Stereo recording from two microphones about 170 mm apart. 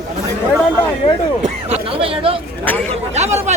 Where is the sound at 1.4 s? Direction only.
35° right (ahead or behind).